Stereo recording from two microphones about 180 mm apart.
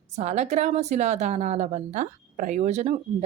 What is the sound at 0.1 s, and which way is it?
A woman's voice, 35° right (ahead or behind).